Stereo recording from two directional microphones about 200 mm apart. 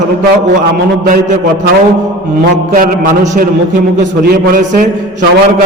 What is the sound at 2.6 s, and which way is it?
A man's voice, 45° right (ahead or behind).